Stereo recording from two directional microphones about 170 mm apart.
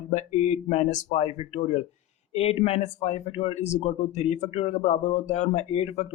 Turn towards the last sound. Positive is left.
turn(degrees=40)  # may be behind; listen again after turning